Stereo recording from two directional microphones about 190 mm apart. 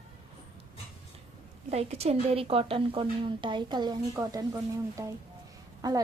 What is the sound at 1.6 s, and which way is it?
A woman's voice, 35° right (ahead or behind).